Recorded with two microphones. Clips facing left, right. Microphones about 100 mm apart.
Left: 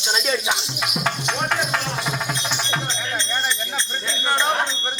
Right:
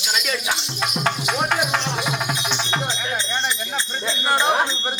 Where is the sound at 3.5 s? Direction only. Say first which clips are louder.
Even; 10° right (ahead or behind).